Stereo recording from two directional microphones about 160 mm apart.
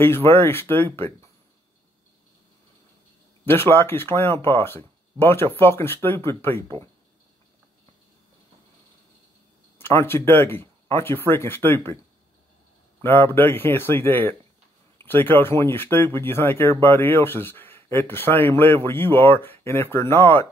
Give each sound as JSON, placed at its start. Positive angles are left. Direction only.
{"t": 0.0, "sound": "speech", "side_deg": 15}
{"t": 3.4, "sound": "speech", "side_deg": 15}
{"t": 9.8, "sound": "speech", "side_deg": 15}
{"t": 13.0, "sound": "speech", "side_deg": 15}